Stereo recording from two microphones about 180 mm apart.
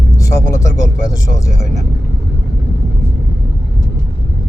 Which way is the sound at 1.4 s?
15° left (ahead or behind).